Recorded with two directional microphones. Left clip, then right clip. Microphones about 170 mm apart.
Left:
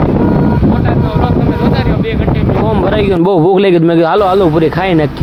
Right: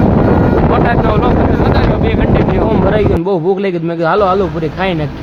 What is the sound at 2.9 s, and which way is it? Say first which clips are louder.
Speech: left 3 dB; 50° left (ahead or behind).